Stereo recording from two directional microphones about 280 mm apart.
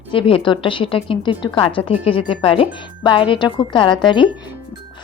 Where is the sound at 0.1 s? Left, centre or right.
Centre.